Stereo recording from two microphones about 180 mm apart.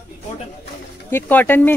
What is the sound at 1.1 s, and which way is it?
Speech, 10° left (ahead or behind).